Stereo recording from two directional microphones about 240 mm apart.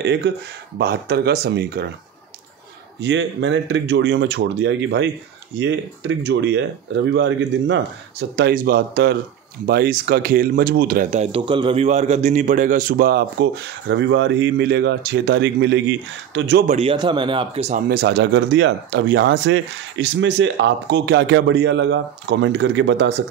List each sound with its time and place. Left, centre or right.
0.0 s speech: right
3.0 s speech: right
16.6 s speech: right
17.8 s speech: right